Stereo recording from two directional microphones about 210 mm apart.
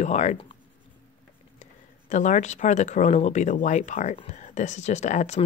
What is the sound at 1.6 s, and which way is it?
Speech, 35° left (ahead or behind).